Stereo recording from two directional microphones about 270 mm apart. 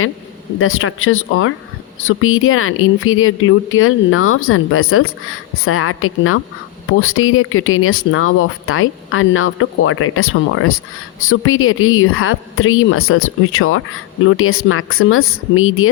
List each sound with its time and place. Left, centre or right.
0.6 s speech: left